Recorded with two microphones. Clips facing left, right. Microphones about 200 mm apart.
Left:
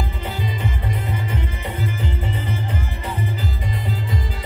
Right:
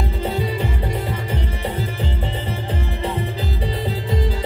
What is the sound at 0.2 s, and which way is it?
Music, 35° right (ahead or behind).